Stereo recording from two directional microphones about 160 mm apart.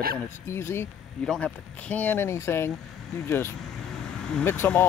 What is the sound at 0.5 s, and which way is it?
Speech, 15° left (ahead or behind).